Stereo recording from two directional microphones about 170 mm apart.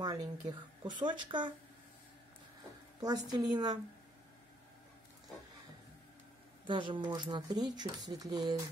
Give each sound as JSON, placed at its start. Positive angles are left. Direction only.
{"t": 0.0, "sound": "speech", "side_deg": -25}
{"t": 3.0, "sound": "speech", "side_deg": -25}
{"t": 6.6, "sound": "speech", "side_deg": -30}